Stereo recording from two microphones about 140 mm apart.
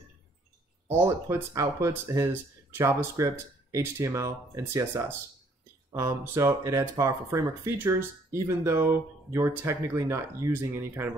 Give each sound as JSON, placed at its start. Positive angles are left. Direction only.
{"t": 0.8, "sound": "speech", "side_deg": -15}